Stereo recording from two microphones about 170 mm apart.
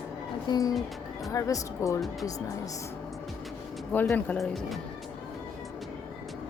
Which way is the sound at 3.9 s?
10° left (ahead or behind).